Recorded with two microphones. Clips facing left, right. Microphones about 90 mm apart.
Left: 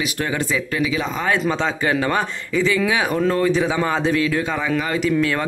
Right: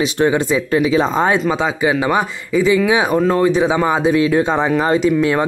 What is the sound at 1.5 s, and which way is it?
A man's voice, 15° right (ahead or behind).